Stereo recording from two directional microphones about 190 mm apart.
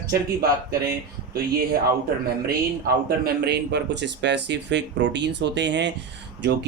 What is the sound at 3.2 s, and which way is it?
Speech, 60° right (ahead or behind).